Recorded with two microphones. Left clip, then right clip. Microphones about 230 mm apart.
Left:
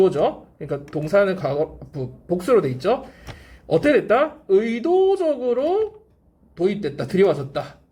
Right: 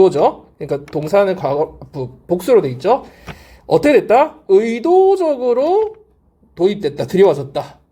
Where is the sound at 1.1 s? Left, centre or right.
Centre.